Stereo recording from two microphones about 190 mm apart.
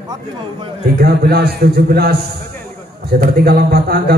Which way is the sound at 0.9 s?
55° right (ahead or behind).